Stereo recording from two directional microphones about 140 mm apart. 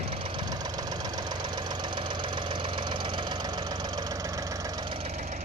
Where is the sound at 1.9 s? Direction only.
35° right (ahead or behind).